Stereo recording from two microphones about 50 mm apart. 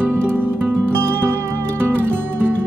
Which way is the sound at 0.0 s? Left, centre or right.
Right.